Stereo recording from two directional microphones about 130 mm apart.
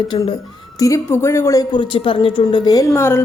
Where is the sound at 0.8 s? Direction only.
20° left (ahead or behind).